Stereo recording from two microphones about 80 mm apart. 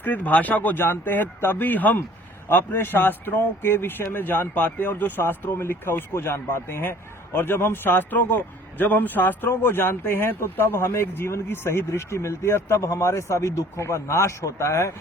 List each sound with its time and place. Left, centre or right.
0.0 s a man's voice: left